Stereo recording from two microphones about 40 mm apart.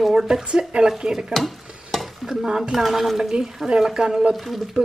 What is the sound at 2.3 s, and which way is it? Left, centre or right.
Speech, centre.